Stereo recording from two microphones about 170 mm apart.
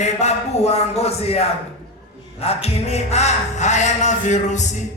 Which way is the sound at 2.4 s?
35° left (ahead or behind).